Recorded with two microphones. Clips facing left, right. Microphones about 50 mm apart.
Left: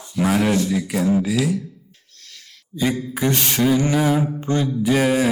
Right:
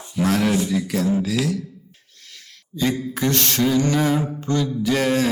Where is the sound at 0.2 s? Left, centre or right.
Centre.